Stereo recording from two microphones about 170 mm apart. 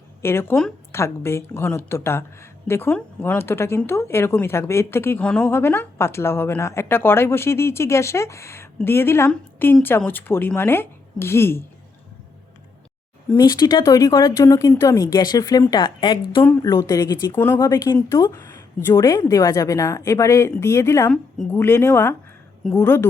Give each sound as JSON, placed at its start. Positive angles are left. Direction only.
{"t": 0.2, "sound": "a woman's voice", "side_deg": 15}
{"t": 13.3, "sound": "speech", "side_deg": 25}
{"t": 17.3, "sound": "a woman's voice", "side_deg": 10}
{"t": 17.6, "sound": "a woman's voice", "side_deg": 25}
{"t": 21.1, "sound": "a woman's voice", "side_deg": 5}